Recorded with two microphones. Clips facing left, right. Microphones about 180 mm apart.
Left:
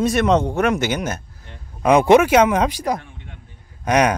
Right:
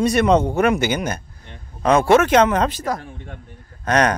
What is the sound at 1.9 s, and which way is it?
Speech, 15° left (ahead or behind).